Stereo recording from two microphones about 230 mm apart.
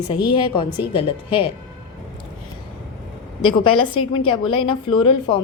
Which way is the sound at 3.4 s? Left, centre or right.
Left.